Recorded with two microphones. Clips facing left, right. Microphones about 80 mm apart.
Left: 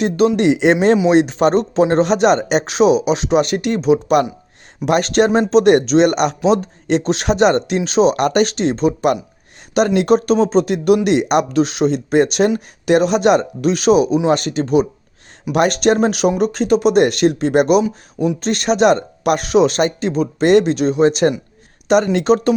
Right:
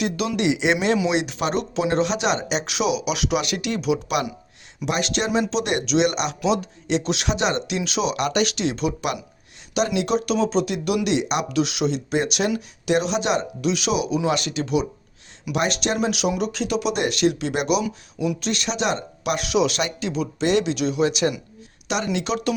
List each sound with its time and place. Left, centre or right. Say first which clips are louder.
0.0 s speech: left 9 dB; left
9.7 s speech: left 8 dB; left
17.8 s speech: left 6 dB; left